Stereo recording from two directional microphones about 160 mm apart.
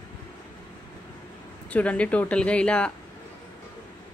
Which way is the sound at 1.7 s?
10° left (ahead or behind).